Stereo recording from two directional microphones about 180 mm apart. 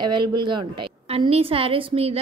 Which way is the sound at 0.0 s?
25° right (ahead or behind).